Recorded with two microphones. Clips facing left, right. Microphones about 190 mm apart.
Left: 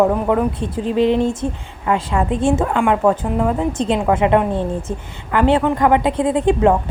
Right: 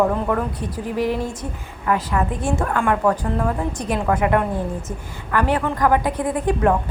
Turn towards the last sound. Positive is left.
turn(degrees=25)  # may be behind; listen again after turning